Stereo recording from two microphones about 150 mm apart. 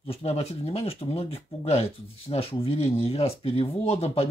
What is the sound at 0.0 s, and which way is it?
Speech, 45° left (ahead or behind).